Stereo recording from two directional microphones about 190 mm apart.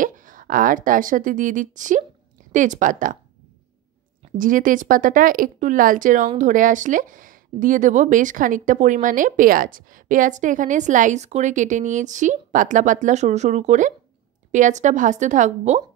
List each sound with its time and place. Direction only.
0.0 s speech: 45° right (ahead or behind)
4.2 s a woman's voice: 45° right (ahead or behind)